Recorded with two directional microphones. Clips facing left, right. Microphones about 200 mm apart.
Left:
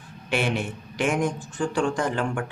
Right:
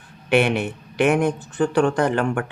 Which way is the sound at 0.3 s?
65° right (ahead or behind).